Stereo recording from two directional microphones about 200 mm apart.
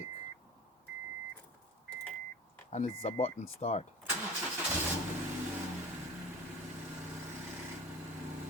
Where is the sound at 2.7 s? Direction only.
30° left (ahead or behind).